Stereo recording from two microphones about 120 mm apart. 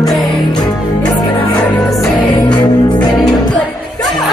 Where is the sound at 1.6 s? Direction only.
10° left (ahead or behind).